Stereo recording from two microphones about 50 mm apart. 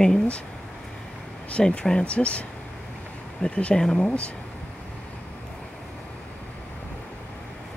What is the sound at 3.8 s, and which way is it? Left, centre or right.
Speech, centre.